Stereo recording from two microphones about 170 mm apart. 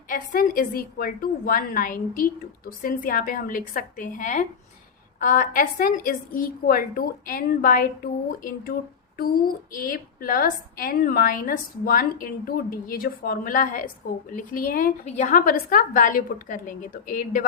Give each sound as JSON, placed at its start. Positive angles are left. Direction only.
{"t": 0.3, "sound": "a woman's voice", "side_deg": 55}
{"t": 9.7, "sound": "a woman's voice", "side_deg": 55}